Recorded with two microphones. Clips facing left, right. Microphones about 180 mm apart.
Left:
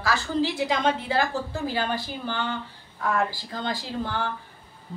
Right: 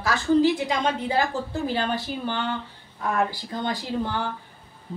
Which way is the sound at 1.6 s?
20° right (ahead or behind).